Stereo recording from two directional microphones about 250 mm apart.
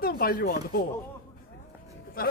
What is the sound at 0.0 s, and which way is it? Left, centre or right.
Speech, left.